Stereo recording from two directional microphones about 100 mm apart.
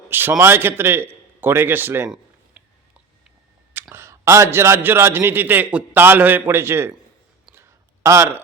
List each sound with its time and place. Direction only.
0.1 s a man's voice: 20° right (ahead or behind)
3.8 s a man's voice: 25° right (ahead or behind)
7.5 s a sound: 25° right (ahead or behind)